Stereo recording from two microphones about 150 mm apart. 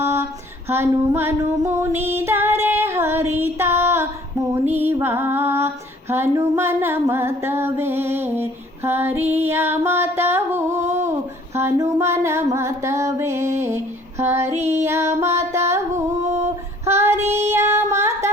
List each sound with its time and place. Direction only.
0.0 s a sound: 15° right (ahead or behind)
0.7 s female singing: 15° right (ahead or behind)
14.7 s music: 15° right (ahead or behind)
17.3 s female singing: 15° right (ahead or behind)